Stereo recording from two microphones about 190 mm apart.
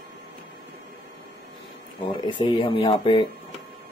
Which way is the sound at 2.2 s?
25° left (ahead or behind).